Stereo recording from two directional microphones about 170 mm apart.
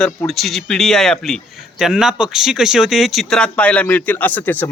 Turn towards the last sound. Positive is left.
turn(degrees=10)  # may be behind; listen again after turning